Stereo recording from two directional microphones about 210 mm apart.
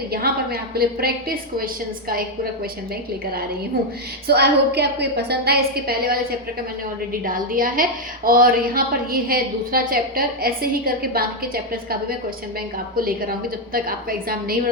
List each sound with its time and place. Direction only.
0.1 s a woman's voice: 45° right (ahead or behind)
4.3 s a woman's voice: 50° right (ahead or behind)